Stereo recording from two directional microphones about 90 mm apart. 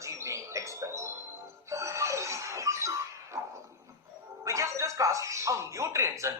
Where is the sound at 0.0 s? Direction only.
35° right (ahead or behind).